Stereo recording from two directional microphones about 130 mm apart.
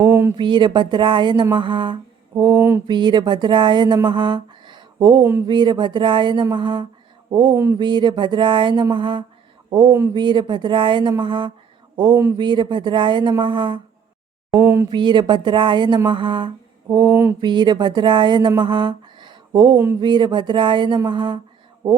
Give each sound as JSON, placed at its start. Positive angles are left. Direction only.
{"t": 0.0, "sound": "a sound", "side_deg": -20}
{"t": 0.3, "sound": "speech", "side_deg": -35}
{"t": 2.6, "sound": "speech", "side_deg": -20}
{"t": 2.8, "sound": "speech", "side_deg": -35}
{"t": 7.5, "sound": "speech", "side_deg": -20}
{"t": 7.8, "sound": "speech", "side_deg": -35}
{"t": 14.5, "sound": "mantra", "side_deg": -15}
{"t": 14.8, "sound": "speech", "side_deg": -35}
{"t": 17.0, "sound": "mantra", "side_deg": -15}
{"t": 17.4, "sound": "speech", "side_deg": -35}
{"t": 19.7, "sound": "speech", "side_deg": -20}
{"t": 20.0, "sound": "speech", "side_deg": -35}